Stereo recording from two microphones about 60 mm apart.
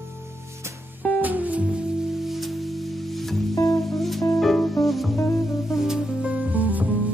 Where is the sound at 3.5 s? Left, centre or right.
Left.